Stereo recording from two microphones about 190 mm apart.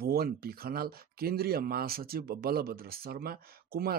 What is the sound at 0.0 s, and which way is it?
Speech, 55° right (ahead or behind).